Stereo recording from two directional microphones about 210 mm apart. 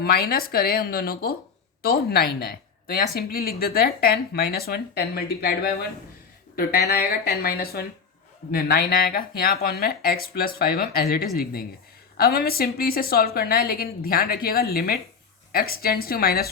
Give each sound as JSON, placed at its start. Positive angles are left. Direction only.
{"t": 0.0, "sound": "speech", "side_deg": 45}